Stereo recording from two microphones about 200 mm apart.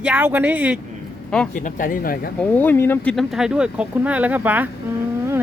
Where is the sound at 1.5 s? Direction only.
40° left (ahead or behind).